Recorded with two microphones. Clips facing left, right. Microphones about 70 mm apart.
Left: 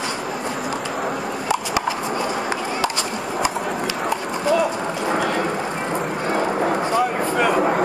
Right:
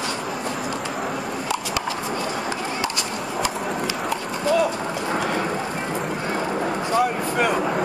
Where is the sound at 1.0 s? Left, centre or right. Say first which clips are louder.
Left 3 dB; centre.